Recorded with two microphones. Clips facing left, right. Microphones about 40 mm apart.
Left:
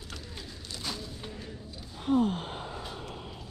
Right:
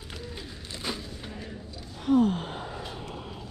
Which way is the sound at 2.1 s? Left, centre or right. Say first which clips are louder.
Right 4 dB; right.